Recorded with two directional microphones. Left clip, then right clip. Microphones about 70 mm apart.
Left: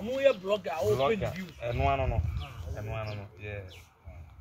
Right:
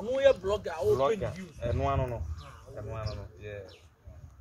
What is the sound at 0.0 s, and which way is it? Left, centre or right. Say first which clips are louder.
Speech: right 2 dB; right.